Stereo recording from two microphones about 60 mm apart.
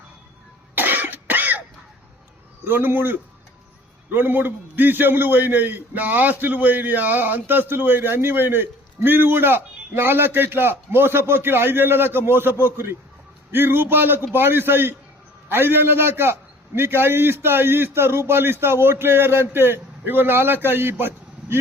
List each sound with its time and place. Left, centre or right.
0.8 s cough: right
2.6 s a man's voice: right